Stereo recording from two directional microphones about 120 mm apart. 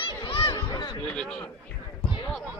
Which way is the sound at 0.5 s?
40° left (ahead or behind).